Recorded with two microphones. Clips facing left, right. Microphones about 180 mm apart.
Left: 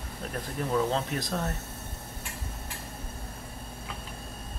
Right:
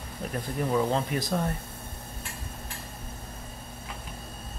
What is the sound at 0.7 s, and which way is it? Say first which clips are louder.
Speech: right 1 dB; 10° right (ahead or behind).